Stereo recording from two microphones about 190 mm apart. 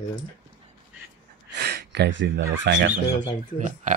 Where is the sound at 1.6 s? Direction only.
55° right (ahead or behind).